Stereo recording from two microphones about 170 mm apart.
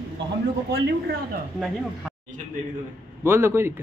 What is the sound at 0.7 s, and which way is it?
Speech, 75° right (ahead or behind).